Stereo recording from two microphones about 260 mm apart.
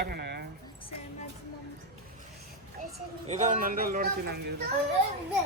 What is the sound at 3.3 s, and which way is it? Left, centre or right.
A man's voice, right.